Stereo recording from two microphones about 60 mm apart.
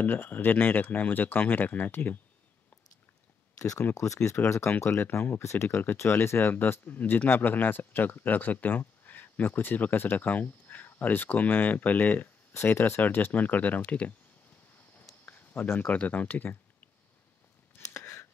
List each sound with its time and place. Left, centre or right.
0.0 s speech: left
3.5 s speech: left
4.7 s speech: left
5.4 s speech: left
12.7 s speech: left
15.2 s a sound: left
15.9 s speech: left
17.8 s a sound: left